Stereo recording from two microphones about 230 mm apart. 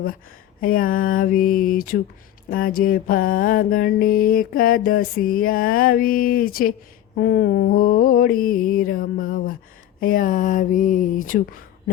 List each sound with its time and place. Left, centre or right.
0.6 s mantra: left